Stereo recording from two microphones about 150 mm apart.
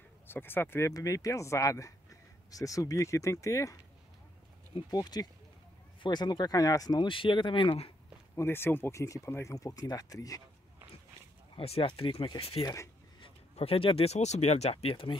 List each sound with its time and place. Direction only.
0.3 s speech: 15° left (ahead or behind)
4.9 s speech: 25° left (ahead or behind)
8.4 s speech: 15° left (ahead or behind)
11.5 s speech: 40° left (ahead or behind)
12.6 s speech: 20° left (ahead or behind)
13.2 s speech: 40° left (ahead or behind)